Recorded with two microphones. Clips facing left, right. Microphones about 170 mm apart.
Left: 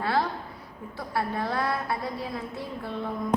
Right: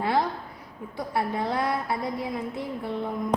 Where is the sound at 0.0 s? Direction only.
20° right (ahead or behind).